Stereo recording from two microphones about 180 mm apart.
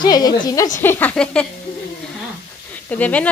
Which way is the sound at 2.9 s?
10° left (ahead or behind).